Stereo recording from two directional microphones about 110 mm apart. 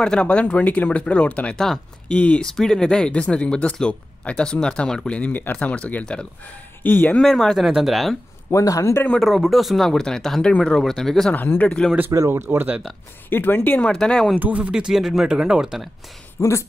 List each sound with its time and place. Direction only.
0.0 s speech: 10° left (ahead or behind)
7.2 s speech: 5° left (ahead or behind)
8.5 s a man's voice: 30° left (ahead or behind)
9.1 s speech: centre (ahead or behind)
11.3 s speech: 15° left (ahead or behind)
12.1 s speech: 25° right (ahead or behind)
13.3 s speech: 15° left (ahead or behind)
14.4 s speech: 10° right (ahead or behind)
16.3 s speech: 25° left (ahead or behind)